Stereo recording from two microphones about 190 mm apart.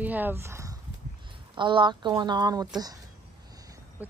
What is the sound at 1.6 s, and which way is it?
Speech, 25° right (ahead or behind).